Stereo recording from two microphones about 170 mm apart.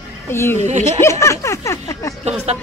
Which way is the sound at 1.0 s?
15° left (ahead or behind).